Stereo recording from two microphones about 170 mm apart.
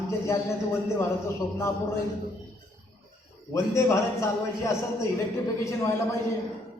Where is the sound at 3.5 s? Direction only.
15° left (ahead or behind).